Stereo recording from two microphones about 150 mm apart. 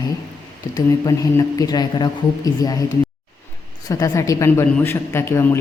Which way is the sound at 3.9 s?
20° left (ahead or behind).